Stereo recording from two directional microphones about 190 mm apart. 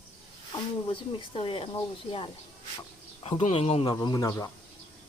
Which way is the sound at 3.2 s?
30° left (ahead or behind).